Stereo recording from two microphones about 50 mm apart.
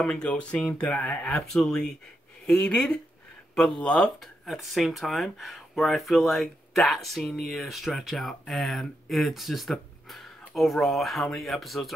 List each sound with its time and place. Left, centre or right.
0.0 s speech: centre
4.2 s speech: centre